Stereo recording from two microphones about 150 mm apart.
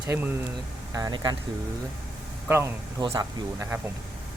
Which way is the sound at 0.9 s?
25° right (ahead or behind).